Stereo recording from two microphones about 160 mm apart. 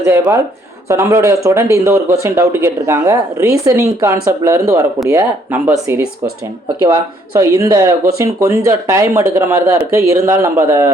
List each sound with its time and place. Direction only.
0.0 s speech: 15° right (ahead or behind)
7.3 s speech: 20° right (ahead or behind)